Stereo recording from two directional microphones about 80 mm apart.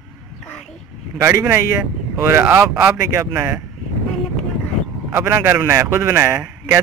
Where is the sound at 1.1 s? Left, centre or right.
Right.